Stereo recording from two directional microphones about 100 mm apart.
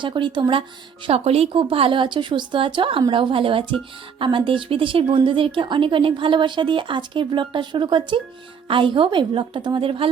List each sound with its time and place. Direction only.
0.0 s speech: 55° right (ahead or behind)
1.0 s speech: 90° right; by 10.1 s 65° right (ahead or behind)